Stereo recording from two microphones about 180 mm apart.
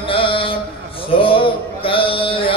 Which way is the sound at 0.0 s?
30° left (ahead or behind).